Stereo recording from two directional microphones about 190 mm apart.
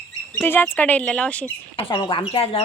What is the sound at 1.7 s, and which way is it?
Speech, 25° left (ahead or behind).